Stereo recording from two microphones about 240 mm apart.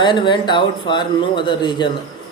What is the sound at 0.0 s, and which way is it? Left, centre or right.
A man's voice, left.